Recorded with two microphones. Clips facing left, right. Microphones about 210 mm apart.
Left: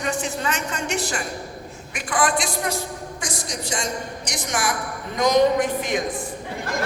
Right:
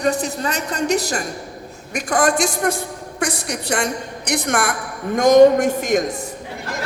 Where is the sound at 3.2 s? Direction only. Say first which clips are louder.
Right 9 dB; 65° right (ahead or behind); by 6.0 s 45° right (ahead or behind).